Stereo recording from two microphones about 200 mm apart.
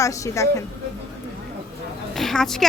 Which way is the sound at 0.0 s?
15° left (ahead or behind).